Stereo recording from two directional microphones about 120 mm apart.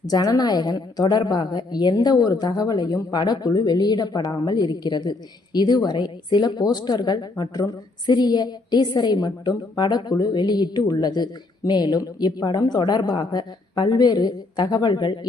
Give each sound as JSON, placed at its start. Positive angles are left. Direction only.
{"t": 0.0, "sound": "a woman's voice", "side_deg": 30}